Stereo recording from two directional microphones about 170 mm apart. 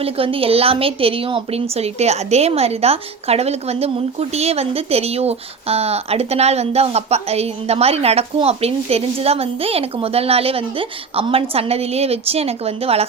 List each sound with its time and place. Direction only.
0.0 s a woman's voice: 35° right (ahead or behind)